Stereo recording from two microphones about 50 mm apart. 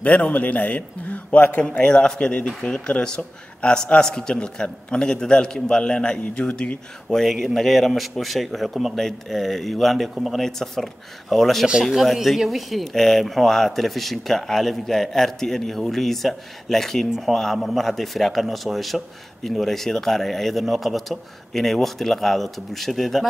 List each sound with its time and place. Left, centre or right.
0.0 s a man's voice: left; by 23.2 s centre